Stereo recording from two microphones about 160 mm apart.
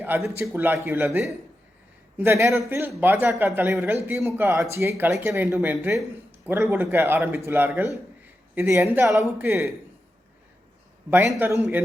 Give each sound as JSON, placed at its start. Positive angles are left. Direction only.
{"t": 0.0, "sound": "speech", "side_deg": -15}
{"t": 11.3, "sound": "speech", "side_deg": -15}